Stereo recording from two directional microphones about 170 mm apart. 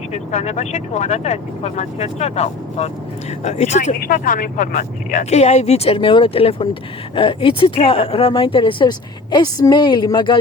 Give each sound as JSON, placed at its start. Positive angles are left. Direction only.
{"t": 0.1, "sound": "speech", "side_deg": 40}
{"t": 3.9, "sound": "speech", "side_deg": 55}